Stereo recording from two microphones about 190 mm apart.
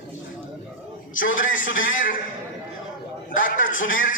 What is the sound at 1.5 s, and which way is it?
Speech, 45° left (ahead or behind).